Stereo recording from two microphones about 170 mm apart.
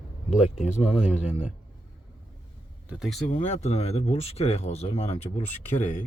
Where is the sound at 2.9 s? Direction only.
Centre (ahead or behind).